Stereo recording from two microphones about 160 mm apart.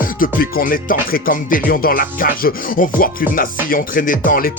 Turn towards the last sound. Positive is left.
turn(degrees=60)  # may be behind; listen again after turning